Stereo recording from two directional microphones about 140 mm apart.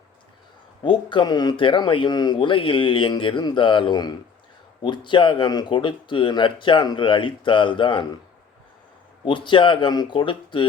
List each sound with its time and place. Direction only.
0.8 s a man's voice: 35° left (ahead or behind)
9.2 s a man's voice: 35° left (ahead or behind)